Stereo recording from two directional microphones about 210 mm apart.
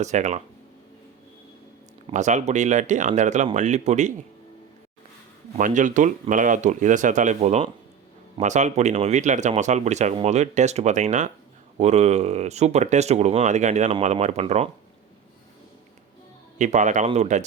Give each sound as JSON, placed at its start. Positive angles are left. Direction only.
{"t": 0.0, "sound": "speech", "side_deg": -35}
{"t": 2.0, "sound": "speech", "side_deg": -35}
{"t": 5.5, "sound": "speech", "side_deg": -40}
{"t": 16.6, "sound": "speech", "side_deg": -35}